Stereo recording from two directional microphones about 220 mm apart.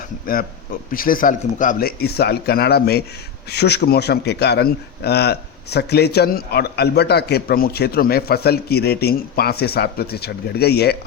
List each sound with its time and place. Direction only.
0.9 s a man's voice: 40° left (ahead or behind)